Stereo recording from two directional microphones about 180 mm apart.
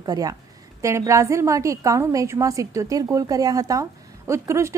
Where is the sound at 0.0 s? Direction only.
20° right (ahead or behind).